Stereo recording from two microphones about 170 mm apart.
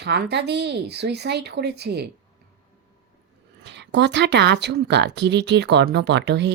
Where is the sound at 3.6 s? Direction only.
90° right.